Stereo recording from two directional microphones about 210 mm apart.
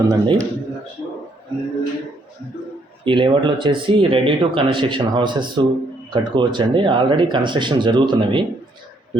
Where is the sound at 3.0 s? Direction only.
25° right (ahead or behind).